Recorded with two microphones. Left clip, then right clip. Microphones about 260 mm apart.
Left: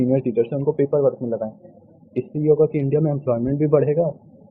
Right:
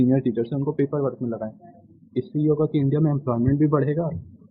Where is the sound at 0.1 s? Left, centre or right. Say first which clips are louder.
Left 4 dB; right.